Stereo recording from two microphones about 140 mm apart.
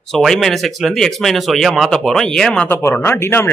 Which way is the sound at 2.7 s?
15° left (ahead or behind).